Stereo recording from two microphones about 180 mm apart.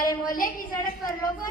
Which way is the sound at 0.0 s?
50° left (ahead or behind).